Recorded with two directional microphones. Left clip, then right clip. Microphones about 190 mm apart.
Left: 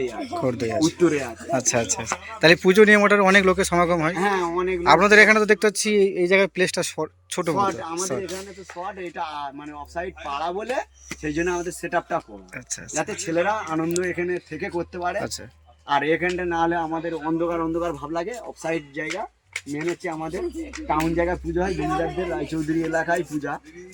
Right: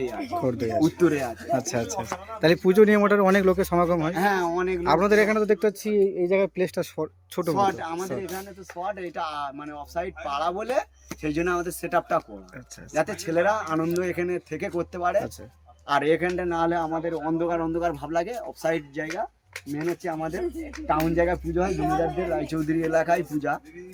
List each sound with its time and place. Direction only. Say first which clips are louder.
0.0 s a man's voice: left 2 dB; 5° right (ahead or behind)
0.9 s speech: left 2 dB; 25° right (ahead or behind)
1.5 s a man's voice: left 5 dB; centre (ahead or behind)
4.1 s speech: left 1 dB; 25° right (ahead or behind)
4.8 s a man's voice: left 7 dB; 5° right (ahead or behind)
8.8 s a man's voice: right 1 dB; 20° right (ahead or behind)
13.2 s speech: left 2 dB; 15° right (ahead or behind); by 15.1 s 35° right (ahead or behind)
15.9 s a man's voice: left 1 dB; 20° right (ahead or behind)
22.9 s speech: right 3 dB; 25° right (ahead or behind)